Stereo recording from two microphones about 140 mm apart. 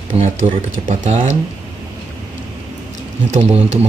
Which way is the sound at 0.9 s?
60° right (ahead or behind).